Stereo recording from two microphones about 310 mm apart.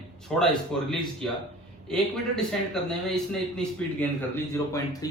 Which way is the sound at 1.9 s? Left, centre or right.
Centre.